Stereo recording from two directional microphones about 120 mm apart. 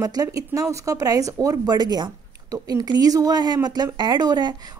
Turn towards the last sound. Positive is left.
turn(degrees=-35)  # may be behind; listen again after turning